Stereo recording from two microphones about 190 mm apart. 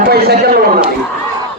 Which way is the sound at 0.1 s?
55° right (ahead or behind).